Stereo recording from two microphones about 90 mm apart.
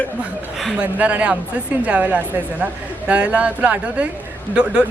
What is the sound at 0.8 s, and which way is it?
A woman's voice, 15° right (ahead or behind).